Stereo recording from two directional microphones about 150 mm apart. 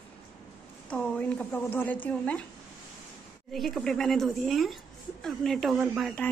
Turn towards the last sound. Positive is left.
turn(degrees=0)  # may be behind; listen again after turning